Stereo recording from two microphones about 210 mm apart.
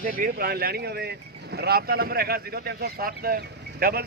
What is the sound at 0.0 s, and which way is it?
Speech, 40° right (ahead or behind).